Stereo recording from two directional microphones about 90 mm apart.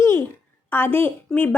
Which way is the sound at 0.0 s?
35° left (ahead or behind).